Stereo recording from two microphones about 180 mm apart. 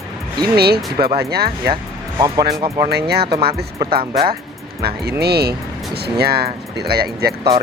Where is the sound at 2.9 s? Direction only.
65° right (ahead or behind).